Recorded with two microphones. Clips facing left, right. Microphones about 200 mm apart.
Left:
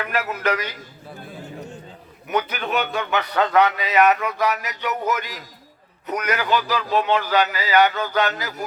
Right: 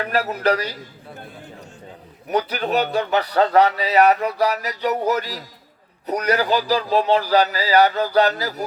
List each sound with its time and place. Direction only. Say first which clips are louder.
0.0 s a man's voice: right 3 dB; 35° right (ahead or behind)
2.2 s a man's voice: right 2 dB; 35° right (ahead or behind)